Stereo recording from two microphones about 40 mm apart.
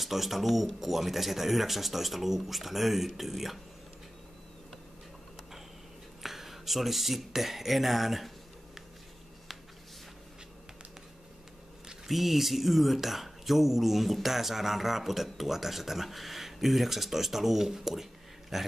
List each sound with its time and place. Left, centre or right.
0.0 s speech: centre
6.2 s speech: centre
12.1 s speech: centre